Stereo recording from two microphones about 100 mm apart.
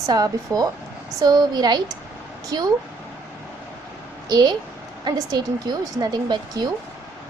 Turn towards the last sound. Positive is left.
turn(degrees=-45)  # may be behind; listen again after turning